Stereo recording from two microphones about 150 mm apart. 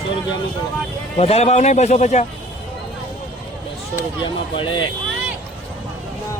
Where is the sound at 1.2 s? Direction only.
45° left (ahead or behind).